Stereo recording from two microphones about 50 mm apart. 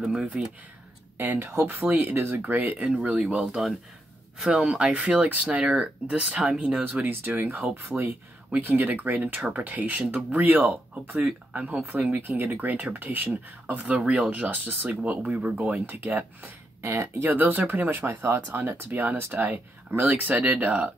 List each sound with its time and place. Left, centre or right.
0.1 s speech: centre
1.1 s speech: right
2.3 s speech: right
2.8 s speech: right
4.4 s speech: centre
6.8 s speech: right
8.5 s speech: right
11.5 s speech: right
12.1 s speech: right
16.8 s speech: right
17.3 s speech: right
19.1 s speech: right
19.4 s speech: right